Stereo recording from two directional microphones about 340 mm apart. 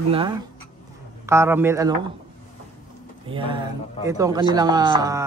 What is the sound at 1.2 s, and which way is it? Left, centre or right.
Speech, centre.